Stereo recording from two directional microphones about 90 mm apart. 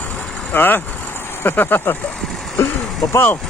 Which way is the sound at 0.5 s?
20° left (ahead or behind).